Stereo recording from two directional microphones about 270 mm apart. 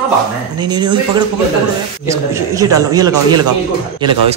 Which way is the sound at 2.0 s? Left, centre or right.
Centre.